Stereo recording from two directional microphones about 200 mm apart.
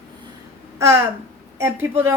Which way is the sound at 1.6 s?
10° right (ahead or behind).